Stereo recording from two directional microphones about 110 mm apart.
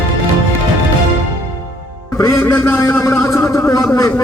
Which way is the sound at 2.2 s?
30° left (ahead or behind).